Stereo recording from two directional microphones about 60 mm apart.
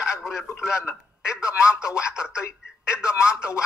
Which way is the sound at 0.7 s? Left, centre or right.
Centre.